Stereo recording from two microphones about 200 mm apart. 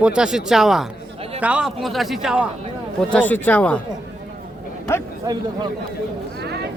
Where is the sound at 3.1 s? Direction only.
10° left (ahead or behind).